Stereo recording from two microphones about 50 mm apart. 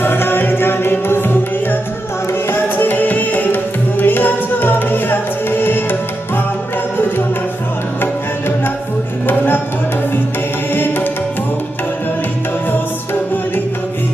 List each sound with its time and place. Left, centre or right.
0.0 s music: left
2.5 s music: left
9.3 s music: left
10.7 s music: left